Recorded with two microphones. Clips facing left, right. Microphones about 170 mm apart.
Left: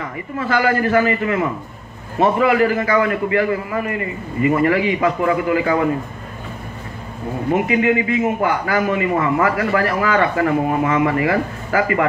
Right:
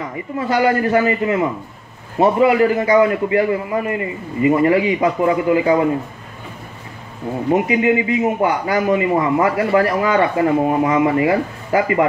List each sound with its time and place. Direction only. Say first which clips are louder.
0.5 s a man's voice: right 1 dB; 20° right (ahead or behind)
7.5 s a man's voice: right 1 dB; 20° right (ahead or behind)